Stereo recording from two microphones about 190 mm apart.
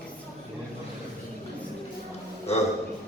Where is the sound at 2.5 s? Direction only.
35° left (ahead or behind).